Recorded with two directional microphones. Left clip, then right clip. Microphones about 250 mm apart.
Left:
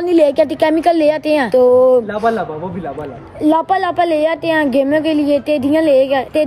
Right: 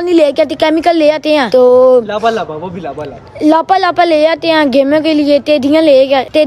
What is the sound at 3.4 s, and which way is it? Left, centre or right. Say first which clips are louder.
A woman's voice: right 5 dB; centre.